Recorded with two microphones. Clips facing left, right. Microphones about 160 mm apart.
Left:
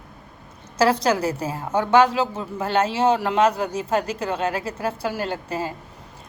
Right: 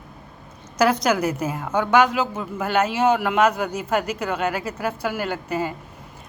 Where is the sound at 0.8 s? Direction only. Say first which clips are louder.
Even; 30° left (ahead or behind).